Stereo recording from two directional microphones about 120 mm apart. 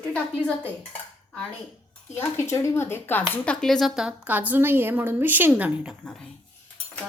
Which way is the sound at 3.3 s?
10° left (ahead or behind).